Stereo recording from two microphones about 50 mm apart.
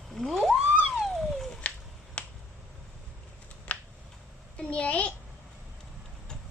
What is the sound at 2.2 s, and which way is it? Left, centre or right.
Finger snapping, left.